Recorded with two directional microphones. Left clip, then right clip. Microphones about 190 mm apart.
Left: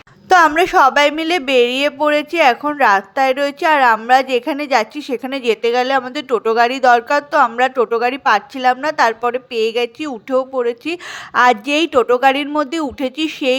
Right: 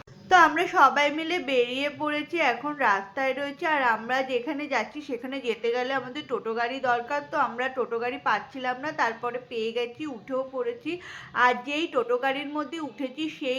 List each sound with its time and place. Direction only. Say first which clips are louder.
0.3 s a woman's voice: left 8 dB; 55° left (ahead or behind)